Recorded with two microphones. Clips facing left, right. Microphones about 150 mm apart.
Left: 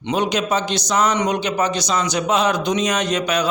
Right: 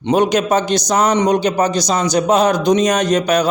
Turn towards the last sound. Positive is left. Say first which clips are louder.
# right 5 dB
turn(degrees=-40)  # may be behind; listen again after turning